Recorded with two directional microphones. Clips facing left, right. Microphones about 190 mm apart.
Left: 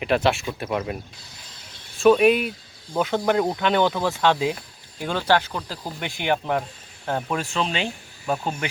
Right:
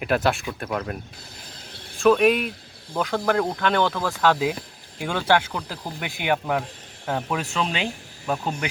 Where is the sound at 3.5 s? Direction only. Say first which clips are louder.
Left 2 dB; 5° left (ahead or behind).